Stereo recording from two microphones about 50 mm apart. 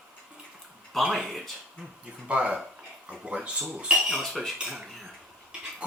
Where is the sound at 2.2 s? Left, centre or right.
Right.